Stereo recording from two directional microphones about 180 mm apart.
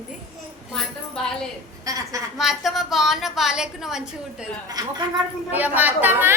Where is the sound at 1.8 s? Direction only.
20° right (ahead or behind).